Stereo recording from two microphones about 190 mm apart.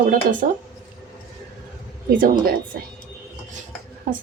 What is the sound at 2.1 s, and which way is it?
Speech, 45° right (ahead or behind).